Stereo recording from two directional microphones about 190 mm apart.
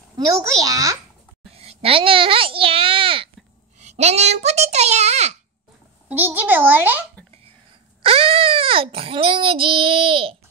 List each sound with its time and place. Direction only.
0.4 s a child's voice: 20° right (ahead or behind)
1.5 s a child's voice: 30° right (ahead or behind)
6.0 s a child's voice: 10° right (ahead or behind)
8.0 s child singing: 30° right (ahead or behind)